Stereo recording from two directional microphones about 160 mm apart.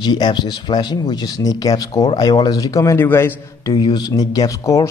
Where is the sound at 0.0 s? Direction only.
30° left (ahead or behind).